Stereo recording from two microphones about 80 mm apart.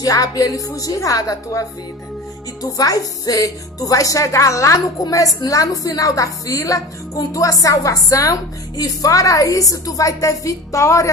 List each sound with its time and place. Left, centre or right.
0.0 s a woman's voice: left